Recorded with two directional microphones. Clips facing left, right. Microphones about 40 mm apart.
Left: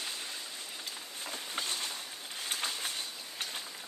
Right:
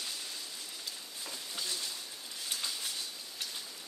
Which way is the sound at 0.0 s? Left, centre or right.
Left.